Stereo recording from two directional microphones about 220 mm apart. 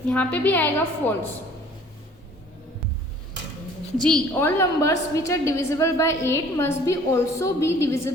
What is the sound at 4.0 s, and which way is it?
A woman's voice, 5° left (ahead or behind).